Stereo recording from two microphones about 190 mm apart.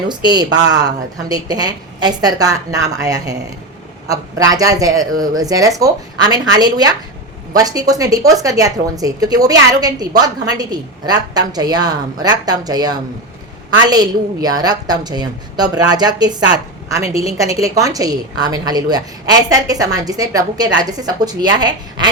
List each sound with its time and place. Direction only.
0.1 s a woman's voice: 20° right (ahead or behind)